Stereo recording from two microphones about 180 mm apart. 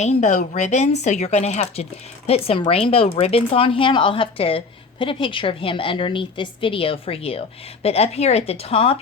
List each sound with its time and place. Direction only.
0.0 s speech: 40° left (ahead or behind)